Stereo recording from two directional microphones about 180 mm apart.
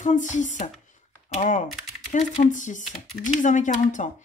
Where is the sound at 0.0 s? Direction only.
45° left (ahead or behind).